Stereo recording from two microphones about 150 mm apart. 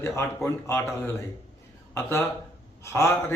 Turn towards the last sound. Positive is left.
turn(degrees=20)  # may be behind; listen again after turning